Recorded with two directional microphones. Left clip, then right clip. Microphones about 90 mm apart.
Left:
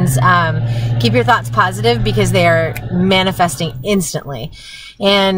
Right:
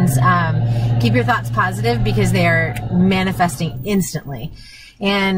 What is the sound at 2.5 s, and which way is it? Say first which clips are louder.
Speech: left 3 dB; 10° left (ahead or behind).